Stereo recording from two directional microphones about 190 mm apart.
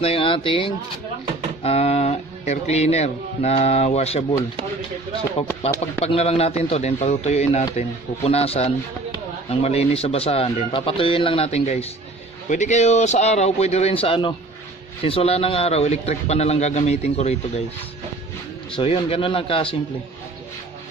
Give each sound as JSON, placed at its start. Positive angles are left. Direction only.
{"t": 0.0, "sound": "speech", "side_deg": 30}
{"t": 5.6, "sound": "speech", "side_deg": 30}
{"t": 18.8, "sound": "speech", "side_deg": 30}